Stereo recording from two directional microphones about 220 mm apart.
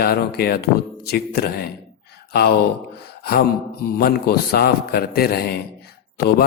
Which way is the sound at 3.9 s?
45° left (ahead or behind).